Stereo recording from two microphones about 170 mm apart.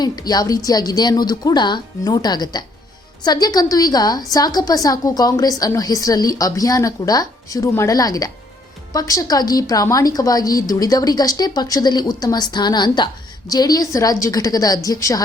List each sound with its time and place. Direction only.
0.0 s a woman's voice: 25° left (ahead or behind)